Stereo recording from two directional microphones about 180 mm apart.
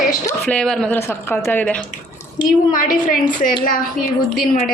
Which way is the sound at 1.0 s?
15° left (ahead or behind).